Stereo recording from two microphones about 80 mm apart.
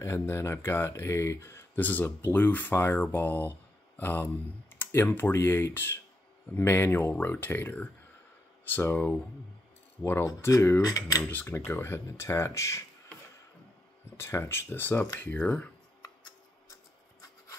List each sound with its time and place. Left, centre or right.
0.0 s speech: left
10.2 s cutlery: left
11.2 s speech: left
14.1 s speech: left; by 15.7 s centre